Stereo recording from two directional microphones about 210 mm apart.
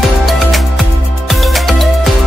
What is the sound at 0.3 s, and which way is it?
Music, centre (ahead or behind).